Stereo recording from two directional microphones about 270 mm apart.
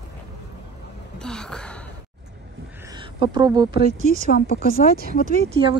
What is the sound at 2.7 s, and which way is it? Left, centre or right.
Speech, centre.